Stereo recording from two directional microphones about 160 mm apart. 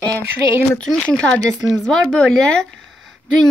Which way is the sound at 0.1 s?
15° right (ahead or behind).